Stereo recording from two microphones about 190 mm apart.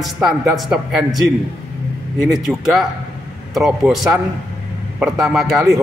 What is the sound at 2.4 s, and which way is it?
A man's voice, centre (ahead or behind).